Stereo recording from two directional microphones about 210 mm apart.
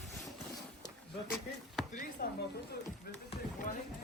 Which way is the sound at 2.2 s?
45° left (ahead or behind).